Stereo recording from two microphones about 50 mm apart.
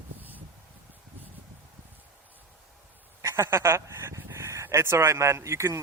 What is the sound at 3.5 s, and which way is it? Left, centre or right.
Speech, right.